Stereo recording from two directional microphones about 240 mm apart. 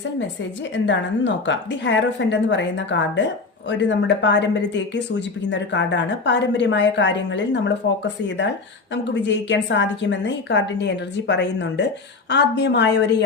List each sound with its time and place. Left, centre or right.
0.2 s a woman's voice: left